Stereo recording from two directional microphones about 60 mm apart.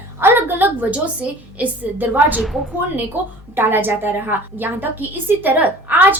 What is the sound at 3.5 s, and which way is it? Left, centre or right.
A woman's voice, right.